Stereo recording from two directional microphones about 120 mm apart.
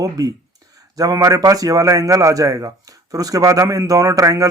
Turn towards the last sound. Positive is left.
turn(degrees=-25)  # may be behind; listen again after turning